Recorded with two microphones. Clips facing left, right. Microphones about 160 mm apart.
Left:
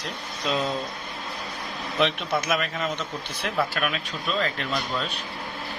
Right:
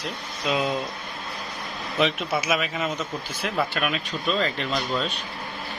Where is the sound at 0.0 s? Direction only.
5° right (ahead or behind).